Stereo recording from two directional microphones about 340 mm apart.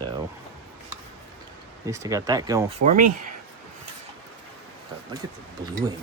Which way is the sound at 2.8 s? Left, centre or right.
Right.